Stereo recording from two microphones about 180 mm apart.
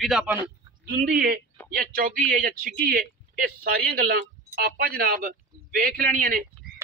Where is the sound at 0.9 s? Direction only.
55° right (ahead or behind).